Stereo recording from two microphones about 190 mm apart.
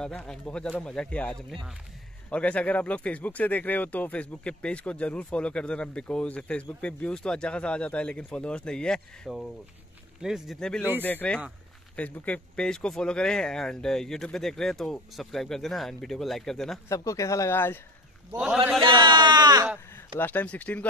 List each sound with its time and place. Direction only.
0.0 s speech: 5° left (ahead or behind)
16.9 s speech: 15° left (ahead or behind)
18.3 s speech: 5° right (ahead or behind)
18.9 s speech: 25° right (ahead or behind)
20.2 s speech: 10° left (ahead or behind)